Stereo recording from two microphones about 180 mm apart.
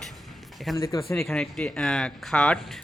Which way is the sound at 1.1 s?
Centre (ahead or behind).